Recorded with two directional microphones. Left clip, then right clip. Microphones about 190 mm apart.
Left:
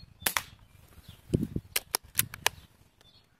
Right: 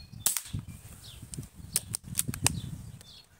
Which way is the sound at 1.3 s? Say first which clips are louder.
Left 7 dB; 45° left (ahead or behind).